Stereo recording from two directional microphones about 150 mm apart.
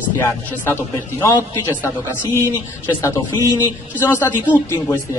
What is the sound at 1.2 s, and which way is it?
Speech, 15° left (ahead or behind).